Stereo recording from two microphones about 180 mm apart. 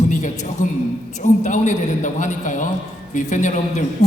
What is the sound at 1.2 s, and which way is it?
A man's voice, 45° left (ahead or behind).